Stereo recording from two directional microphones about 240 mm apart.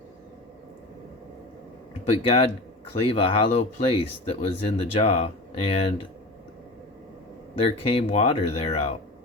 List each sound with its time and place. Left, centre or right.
2.0 s speech: left
7.6 s speech: left